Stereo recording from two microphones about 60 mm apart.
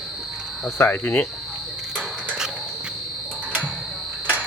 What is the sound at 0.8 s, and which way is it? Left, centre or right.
Speech, left.